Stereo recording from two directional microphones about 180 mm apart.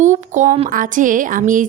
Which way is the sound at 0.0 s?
40° right (ahead or behind).